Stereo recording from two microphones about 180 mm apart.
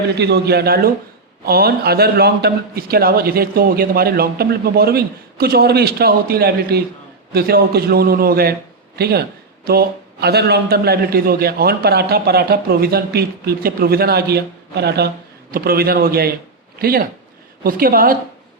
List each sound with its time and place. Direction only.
0.2 s a man's voice: 65° right (ahead or behind)